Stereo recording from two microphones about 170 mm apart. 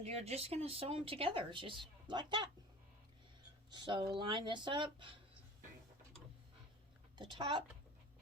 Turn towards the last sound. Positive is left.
turn(degrees=-25)  # may be behind; listen again after turning